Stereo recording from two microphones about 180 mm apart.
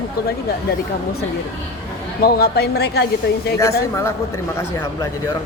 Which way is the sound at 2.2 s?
60° left (ahead or behind).